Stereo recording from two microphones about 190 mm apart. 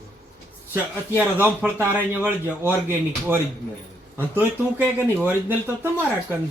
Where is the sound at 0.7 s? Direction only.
10° right (ahead or behind).